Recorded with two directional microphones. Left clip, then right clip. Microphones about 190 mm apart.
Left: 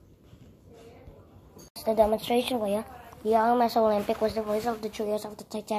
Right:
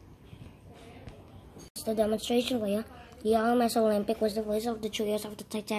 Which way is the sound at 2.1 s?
20° right (ahead or behind).